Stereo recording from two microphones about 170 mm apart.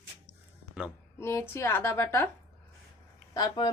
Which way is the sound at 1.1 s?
15° left (ahead or behind).